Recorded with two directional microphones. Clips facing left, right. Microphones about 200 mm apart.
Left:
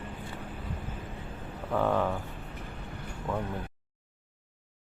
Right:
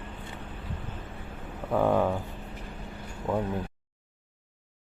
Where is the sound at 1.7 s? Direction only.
15° right (ahead or behind).